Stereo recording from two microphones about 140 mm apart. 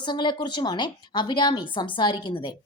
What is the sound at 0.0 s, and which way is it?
A woman's voice, 35° left (ahead or behind).